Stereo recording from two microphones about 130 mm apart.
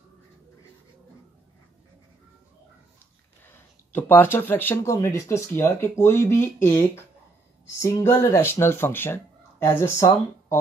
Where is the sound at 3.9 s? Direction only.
15° left (ahead or behind).